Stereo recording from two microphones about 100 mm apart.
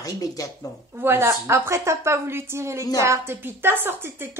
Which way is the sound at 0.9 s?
25° right (ahead or behind).